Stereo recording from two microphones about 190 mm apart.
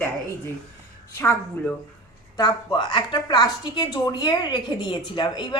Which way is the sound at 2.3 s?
20° left (ahead or behind).